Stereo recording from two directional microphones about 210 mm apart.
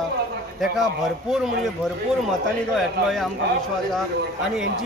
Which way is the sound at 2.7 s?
Centre (ahead or behind).